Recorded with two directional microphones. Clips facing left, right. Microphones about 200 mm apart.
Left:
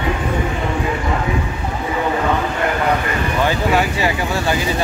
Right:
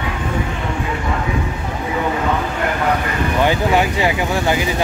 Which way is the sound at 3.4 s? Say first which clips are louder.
Right 1 dB; 15° right (ahead or behind).